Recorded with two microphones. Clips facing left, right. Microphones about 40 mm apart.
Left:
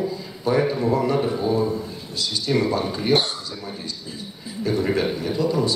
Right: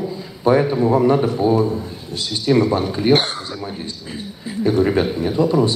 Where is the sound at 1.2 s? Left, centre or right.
Right.